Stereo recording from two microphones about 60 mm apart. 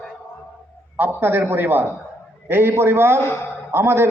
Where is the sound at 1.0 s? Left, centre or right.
Right.